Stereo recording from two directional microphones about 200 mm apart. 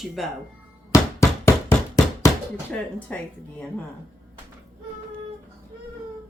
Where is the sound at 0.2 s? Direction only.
Centre (ahead or behind).